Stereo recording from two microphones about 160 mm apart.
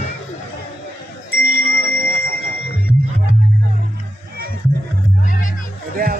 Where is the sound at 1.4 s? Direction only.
60° right (ahead or behind).